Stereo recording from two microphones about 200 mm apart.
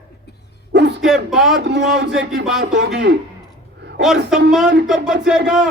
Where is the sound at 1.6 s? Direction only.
60° right (ahead or behind).